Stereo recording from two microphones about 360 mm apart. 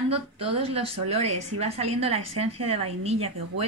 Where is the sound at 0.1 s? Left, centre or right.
Centre.